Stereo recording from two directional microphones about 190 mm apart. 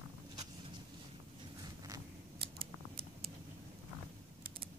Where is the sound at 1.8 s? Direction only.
20° right (ahead or behind).